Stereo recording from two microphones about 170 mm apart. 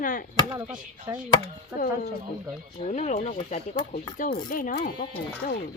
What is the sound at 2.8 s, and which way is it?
Speech, 45° left (ahead or behind).